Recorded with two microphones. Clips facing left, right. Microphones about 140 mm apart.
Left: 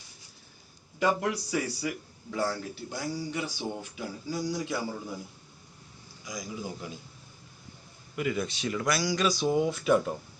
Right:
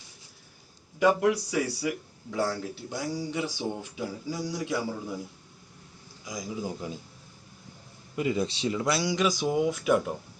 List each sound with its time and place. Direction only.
0.9 s a man's voice: 5° right (ahead or behind)
3.3 s speech: 20° right (ahead or behind)
4.3 s a man's voice: 10° right (ahead or behind)
6.2 s speech: 20° right (ahead or behind)
8.1 s speech: 25° right (ahead or behind); by 10.2 s 10° right (ahead or behind)